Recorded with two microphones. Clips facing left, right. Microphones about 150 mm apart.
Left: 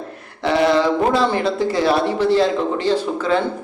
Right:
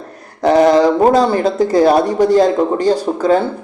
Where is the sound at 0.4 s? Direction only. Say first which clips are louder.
Right 6 dB; 45° right (ahead or behind).